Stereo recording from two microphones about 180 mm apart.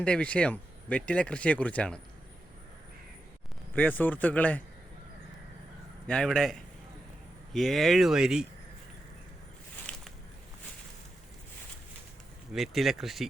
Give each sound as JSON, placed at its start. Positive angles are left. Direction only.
{"t": 0.0, "sound": "speech", "side_deg": 5}
{"t": 3.8, "sound": "speech", "side_deg": 10}
{"t": 6.1, "sound": "speech", "side_deg": 5}
{"t": 9.9, "sound": "a sound", "side_deg": 5}
{"t": 12.5, "sound": "speech", "side_deg": 0}